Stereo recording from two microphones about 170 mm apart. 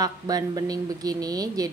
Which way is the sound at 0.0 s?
20° right (ahead or behind).